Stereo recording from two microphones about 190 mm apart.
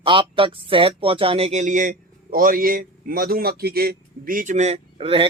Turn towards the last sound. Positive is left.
turn(degrees=-30)  # may be behind; listen again after turning